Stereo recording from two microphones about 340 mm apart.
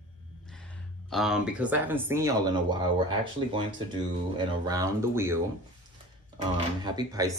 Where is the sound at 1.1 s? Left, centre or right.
Centre.